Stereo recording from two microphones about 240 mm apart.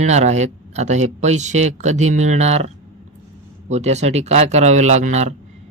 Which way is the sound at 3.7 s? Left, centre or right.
Right.